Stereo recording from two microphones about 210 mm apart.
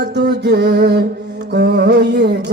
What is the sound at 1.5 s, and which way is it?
Music, 50° right (ahead or behind).